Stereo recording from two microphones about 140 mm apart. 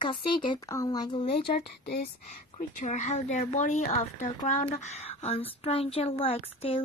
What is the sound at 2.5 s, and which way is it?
A woman's voice, 60° left (ahead or behind).